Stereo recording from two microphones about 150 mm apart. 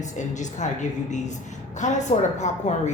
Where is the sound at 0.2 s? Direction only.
55° left (ahead or behind).